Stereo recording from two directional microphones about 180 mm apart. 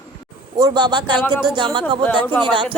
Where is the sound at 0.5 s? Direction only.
25° right (ahead or behind).